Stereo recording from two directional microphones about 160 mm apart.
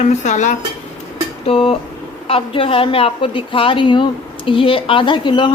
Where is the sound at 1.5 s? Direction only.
35° left (ahead or behind).